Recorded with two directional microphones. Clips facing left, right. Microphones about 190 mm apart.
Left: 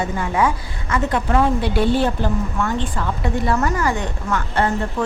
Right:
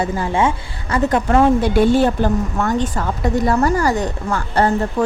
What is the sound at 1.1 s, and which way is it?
Speech, 45° right (ahead or behind).